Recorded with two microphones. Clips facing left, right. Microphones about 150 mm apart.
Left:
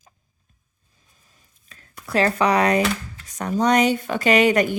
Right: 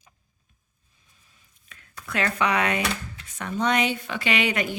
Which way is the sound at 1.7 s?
35° left (ahead or behind).